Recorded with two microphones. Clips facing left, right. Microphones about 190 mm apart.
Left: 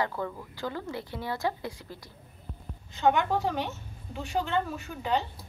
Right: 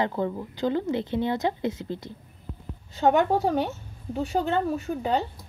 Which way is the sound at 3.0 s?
40° right (ahead or behind).